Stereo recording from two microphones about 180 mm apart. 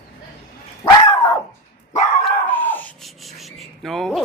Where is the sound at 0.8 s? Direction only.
20° left (ahead or behind).